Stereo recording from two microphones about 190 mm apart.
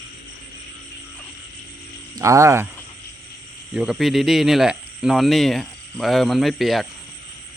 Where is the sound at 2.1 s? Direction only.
15° right (ahead or behind).